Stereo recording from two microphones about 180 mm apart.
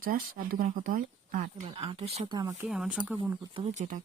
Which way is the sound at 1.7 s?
35° right (ahead or behind).